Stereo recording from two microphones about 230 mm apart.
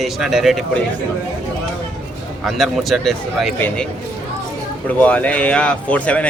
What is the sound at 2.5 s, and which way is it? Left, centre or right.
Speech, centre.